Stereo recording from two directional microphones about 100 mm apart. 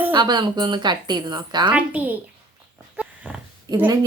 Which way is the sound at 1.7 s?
15° right (ahead or behind).